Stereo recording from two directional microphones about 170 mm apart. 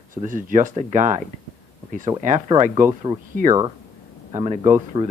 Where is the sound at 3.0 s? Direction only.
25° right (ahead or behind).